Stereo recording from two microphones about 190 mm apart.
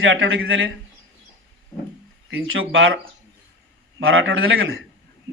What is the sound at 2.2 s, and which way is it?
Speech, 90° right.